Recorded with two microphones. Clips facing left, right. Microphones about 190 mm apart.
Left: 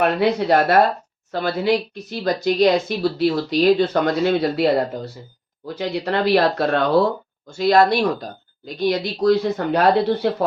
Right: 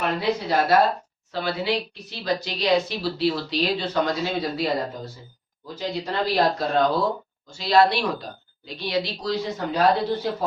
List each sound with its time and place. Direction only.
0.0 s speech: 65° left (ahead or behind)
1.3 s speech: 50° left (ahead or behind); by 7.1 s 65° left (ahead or behind)
7.5 s speech: 50° left (ahead or behind)
10.2 s speech: 65° left (ahead or behind)